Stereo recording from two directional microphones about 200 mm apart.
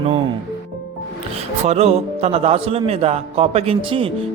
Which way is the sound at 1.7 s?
30° right (ahead or behind).